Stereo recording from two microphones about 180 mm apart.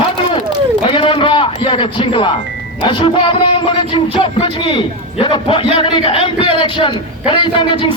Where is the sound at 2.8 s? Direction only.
25° left (ahead or behind).